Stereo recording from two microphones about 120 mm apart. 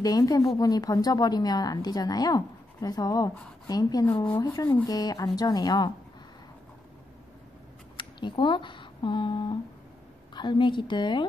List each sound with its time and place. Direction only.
0.0 s a woman's voice: 30° left (ahead or behind)
4.4 s rub: 30° left (ahead or behind)
4.8 s a woman's voice: 30° left (ahead or behind)
8.0 s a woman's voice: 40° left (ahead or behind)